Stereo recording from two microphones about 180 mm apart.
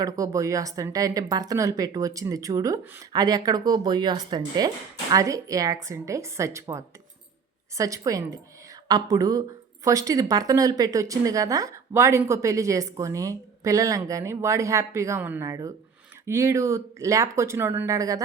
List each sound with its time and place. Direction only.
0.0 s a woman's voice: 20° right (ahead or behind)